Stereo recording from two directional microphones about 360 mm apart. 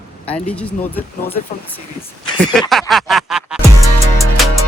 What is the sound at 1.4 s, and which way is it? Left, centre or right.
Speech, centre.